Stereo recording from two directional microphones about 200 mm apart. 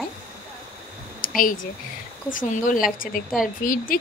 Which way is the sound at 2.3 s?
40° left (ahead or behind).